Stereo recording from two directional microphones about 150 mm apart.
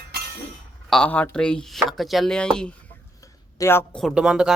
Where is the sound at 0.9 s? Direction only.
5° left (ahead or behind).